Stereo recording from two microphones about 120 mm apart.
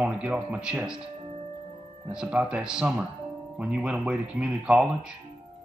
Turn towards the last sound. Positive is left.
turn(degrees=-5)  # may be behind; listen again after turning